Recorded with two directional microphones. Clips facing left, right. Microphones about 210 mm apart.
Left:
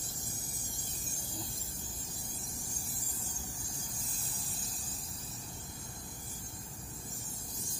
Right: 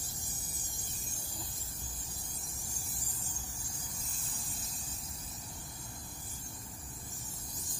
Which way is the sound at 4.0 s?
35° left (ahead or behind).